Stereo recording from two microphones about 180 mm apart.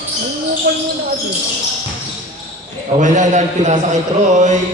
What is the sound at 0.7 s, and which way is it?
Speech, 60° right (ahead or behind).